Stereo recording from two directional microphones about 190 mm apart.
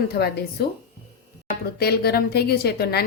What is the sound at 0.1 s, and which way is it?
Speech, 55° left (ahead or behind).